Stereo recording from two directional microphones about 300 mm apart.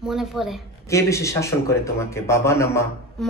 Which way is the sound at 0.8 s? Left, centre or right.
Centre.